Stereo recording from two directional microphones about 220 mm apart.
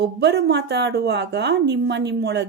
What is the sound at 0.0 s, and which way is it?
Speech, 50° right (ahead or behind).